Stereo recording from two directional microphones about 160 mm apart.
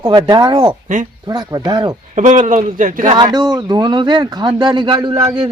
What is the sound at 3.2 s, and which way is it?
Speech, 25° right (ahead or behind).